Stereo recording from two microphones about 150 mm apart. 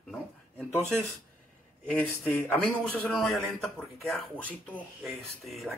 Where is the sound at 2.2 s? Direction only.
10° left (ahead or behind).